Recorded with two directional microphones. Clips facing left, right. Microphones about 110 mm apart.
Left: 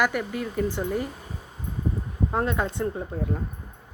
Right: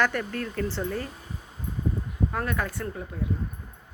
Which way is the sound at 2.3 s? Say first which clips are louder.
Left 7 dB; 20° left (ahead or behind).